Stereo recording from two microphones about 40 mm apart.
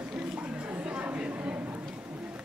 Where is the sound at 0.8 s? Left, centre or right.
Right.